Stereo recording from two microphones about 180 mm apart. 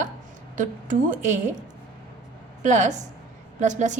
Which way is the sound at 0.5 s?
45° right (ahead or behind).